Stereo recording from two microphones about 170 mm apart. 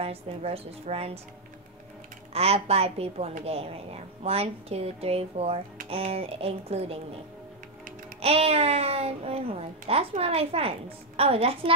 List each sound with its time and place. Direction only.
0.0 s a woman's voice: 35° right (ahead or behind)
2.3 s a woman's voice: 35° right (ahead or behind)
8.2 s a woman's voice: 35° right (ahead or behind)